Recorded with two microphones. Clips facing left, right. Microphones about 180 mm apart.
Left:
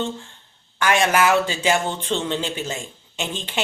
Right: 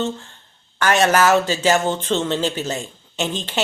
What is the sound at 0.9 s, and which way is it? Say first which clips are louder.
Speech: right 3 dB; 40° right (ahead or behind).